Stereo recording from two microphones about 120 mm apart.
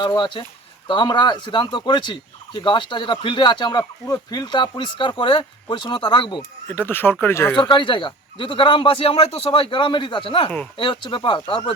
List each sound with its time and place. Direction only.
0.0 s speech: 40° left (ahead or behind)
6.7 s speech: 15° left (ahead or behind)
7.5 s a man's voice: 40° left (ahead or behind)